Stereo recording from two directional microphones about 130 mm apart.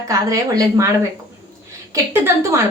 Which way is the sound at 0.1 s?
25° right (ahead or behind).